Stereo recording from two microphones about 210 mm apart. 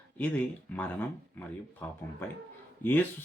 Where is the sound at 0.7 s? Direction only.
5° left (ahead or behind).